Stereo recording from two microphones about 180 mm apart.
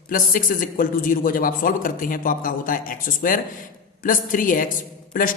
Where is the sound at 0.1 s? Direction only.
50° left (ahead or behind).